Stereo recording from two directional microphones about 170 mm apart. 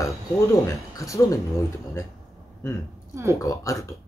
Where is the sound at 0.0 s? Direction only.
20° left (ahead or behind).